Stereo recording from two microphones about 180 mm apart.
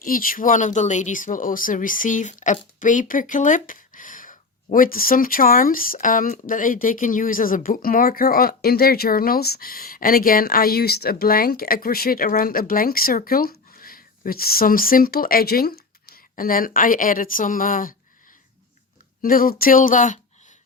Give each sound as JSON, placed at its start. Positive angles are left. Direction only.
{"t": 0.0, "sound": "speech", "side_deg": 50}
{"t": 19.2, "sound": "speech", "side_deg": 50}